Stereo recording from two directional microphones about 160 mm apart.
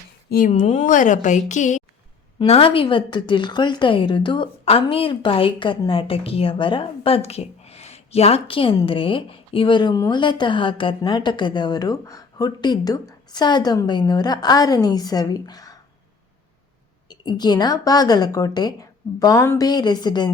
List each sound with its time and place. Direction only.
0.3 s a woman's voice: 60° left (ahead or behind)
2.4 s a woman's voice: 35° left (ahead or behind)
17.1 s a woman's voice: 25° left (ahead or behind)